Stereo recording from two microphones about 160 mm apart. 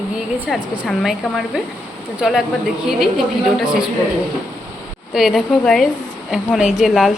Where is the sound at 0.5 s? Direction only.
Centre (ahead or behind).